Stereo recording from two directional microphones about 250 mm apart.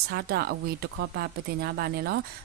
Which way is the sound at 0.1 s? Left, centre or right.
Right.